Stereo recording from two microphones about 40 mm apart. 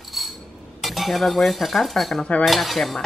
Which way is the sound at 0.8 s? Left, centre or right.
Centre.